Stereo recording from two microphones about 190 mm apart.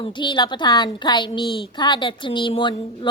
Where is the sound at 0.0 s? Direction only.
25° left (ahead or behind).